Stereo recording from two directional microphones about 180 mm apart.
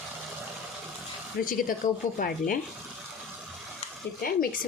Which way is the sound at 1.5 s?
50° left (ahead or behind).